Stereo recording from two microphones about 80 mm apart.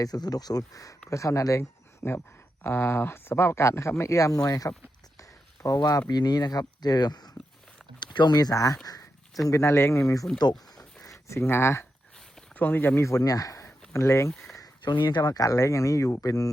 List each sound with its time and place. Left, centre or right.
0.0 s speech: left
2.6 s speech: left
6.1 s speech: left
7.9 s speech: left
9.5 s speech: left
13.0 s speech: left
13.7 s a sound: left
14.3 s speech: centre
14.8 s speech: left
15.3 s speech: left